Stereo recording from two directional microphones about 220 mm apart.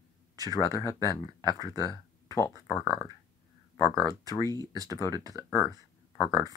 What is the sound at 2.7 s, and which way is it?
Speech, 5° left (ahead or behind).